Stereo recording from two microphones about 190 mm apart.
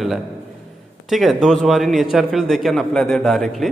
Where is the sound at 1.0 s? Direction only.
Centre (ahead or behind).